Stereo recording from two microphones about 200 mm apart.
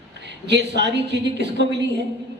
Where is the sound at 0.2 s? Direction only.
60° right (ahead or behind).